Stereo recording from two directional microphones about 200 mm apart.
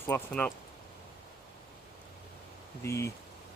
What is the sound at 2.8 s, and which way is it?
Speech, 15° left (ahead or behind).